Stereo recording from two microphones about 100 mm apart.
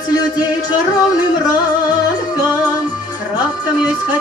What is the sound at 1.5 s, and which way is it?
Music, 40° left (ahead or behind).